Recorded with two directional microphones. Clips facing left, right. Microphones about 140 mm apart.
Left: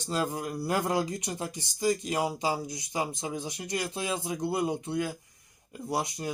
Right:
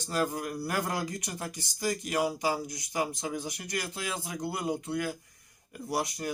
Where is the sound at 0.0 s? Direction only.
20° left (ahead or behind).